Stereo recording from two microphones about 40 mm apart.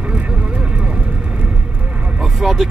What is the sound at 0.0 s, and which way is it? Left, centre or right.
Vehicle, right.